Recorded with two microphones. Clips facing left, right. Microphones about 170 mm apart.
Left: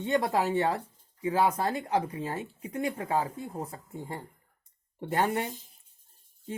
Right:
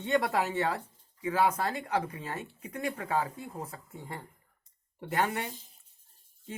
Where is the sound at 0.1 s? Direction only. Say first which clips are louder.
Left 2 dB; 30° left (ahead or behind).